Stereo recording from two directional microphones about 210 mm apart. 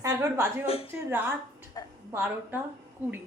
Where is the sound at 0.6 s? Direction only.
25° left (ahead or behind).